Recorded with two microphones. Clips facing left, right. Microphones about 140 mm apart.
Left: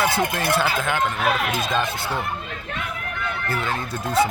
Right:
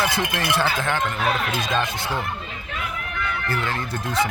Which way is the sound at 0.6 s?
10° left (ahead or behind).